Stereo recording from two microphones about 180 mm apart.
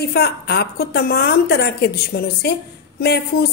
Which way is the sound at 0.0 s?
65° left (ahead or behind).